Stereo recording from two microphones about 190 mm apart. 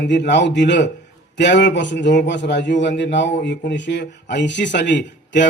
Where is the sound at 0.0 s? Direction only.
65° left (ahead or behind).